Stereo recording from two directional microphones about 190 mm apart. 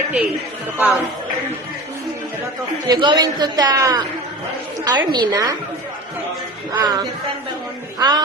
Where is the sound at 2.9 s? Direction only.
25° right (ahead or behind).